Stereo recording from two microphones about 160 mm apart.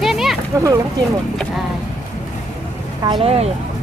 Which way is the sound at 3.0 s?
30° right (ahead or behind).